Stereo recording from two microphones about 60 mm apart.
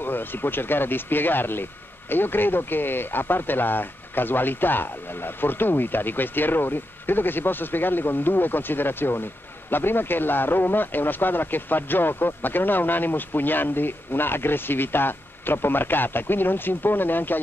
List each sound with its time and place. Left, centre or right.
0.0 s speech: left